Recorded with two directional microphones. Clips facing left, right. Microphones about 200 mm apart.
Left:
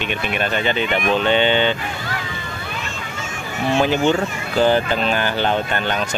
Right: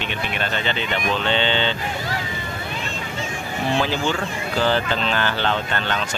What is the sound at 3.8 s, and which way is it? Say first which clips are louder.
Speech: left 6 dB; 20° left (ahead or behind).